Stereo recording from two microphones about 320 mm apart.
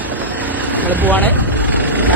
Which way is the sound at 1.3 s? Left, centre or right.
Centre.